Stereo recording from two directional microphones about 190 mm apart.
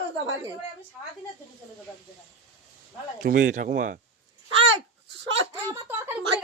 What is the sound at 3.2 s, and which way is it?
Speech, 45° right (ahead or behind).